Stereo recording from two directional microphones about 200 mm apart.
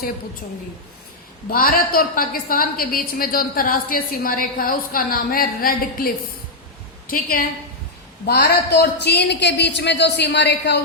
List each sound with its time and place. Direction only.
1.5 s a woman's voice: 45° left (ahead or behind)